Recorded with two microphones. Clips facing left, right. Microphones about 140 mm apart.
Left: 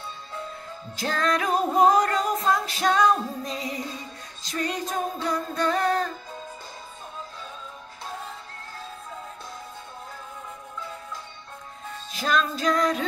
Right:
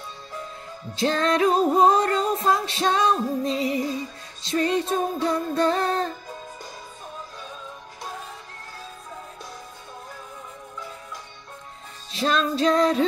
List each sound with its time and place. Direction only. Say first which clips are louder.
0.9 s music: right 4 dB; 25° right (ahead or behind)
12.1 s music: right 2 dB; 25° right (ahead or behind)